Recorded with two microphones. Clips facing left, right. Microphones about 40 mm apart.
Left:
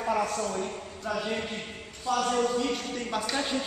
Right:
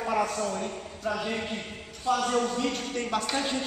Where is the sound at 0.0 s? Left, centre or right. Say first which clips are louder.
Even; centre.